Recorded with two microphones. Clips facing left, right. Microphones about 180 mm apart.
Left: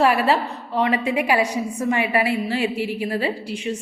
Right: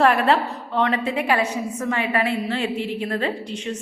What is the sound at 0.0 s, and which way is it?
A woman's voice, 5° left (ahead or behind).